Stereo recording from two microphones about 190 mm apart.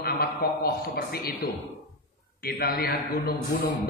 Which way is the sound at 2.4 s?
55° left (ahead or behind).